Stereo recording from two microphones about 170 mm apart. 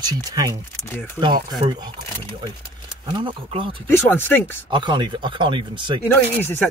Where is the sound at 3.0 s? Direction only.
25° right (ahead or behind).